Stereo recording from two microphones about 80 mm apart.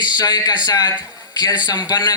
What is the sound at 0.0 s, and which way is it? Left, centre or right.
A man's voice, left.